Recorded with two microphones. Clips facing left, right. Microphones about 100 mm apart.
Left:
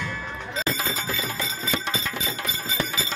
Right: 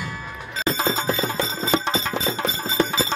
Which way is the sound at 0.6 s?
25° right (ahead or behind).